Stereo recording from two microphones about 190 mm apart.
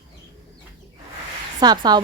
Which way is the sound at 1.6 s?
20° right (ahead or behind).